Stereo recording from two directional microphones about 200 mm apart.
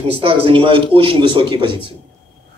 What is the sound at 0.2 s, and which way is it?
Speech, 25° right (ahead or behind).